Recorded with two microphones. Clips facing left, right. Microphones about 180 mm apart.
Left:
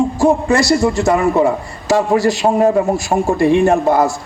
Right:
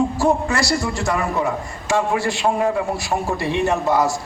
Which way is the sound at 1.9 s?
40° left (ahead or behind).